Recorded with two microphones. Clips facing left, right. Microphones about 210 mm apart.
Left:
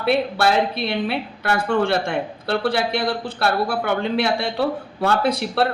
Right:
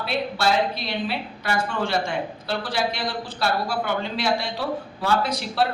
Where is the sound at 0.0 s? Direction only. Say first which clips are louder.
Left 5 dB; 60° left (ahead or behind).